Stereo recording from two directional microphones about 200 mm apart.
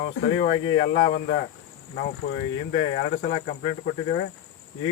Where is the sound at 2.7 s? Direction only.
35° left (ahead or behind).